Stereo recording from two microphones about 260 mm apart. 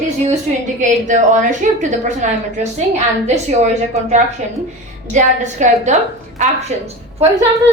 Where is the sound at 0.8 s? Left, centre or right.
Right.